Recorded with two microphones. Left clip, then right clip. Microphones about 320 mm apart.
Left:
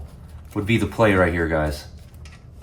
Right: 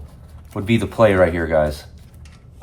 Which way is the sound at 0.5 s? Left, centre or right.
Centre.